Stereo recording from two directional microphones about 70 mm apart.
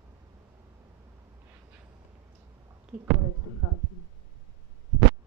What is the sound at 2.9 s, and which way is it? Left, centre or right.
Speech, centre.